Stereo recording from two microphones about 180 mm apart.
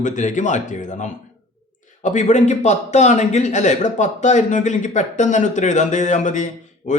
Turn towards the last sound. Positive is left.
turn(degrees=45)  # may be behind; listen again after turning